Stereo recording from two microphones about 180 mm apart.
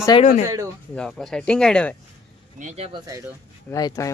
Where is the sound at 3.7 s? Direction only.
20° left (ahead or behind).